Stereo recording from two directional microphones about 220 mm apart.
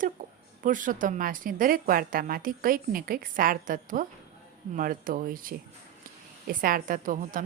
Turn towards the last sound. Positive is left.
turn(degrees=-35)  # may be behind; listen again after turning